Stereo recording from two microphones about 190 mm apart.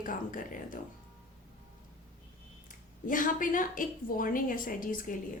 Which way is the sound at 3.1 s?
45° left (ahead or behind).